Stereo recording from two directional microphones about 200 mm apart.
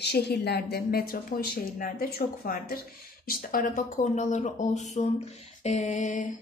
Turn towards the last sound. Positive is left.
turn(degrees=40)  # may be behind; listen again after turning